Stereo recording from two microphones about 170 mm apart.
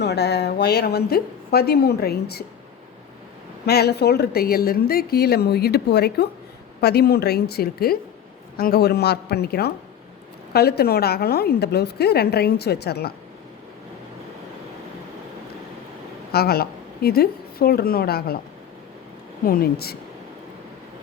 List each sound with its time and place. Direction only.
0.0 s a woman's voice: 75° left (ahead or behind)
3.7 s a woman's voice: 70° left (ahead or behind)
16.3 s a woman's voice: 65° left (ahead or behind)
19.5 s speech: 60° left (ahead or behind)